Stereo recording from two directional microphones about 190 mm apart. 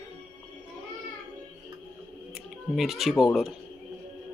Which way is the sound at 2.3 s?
Centre (ahead or behind).